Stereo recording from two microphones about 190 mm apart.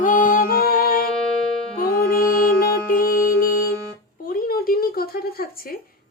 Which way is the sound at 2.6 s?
50° left (ahead or behind).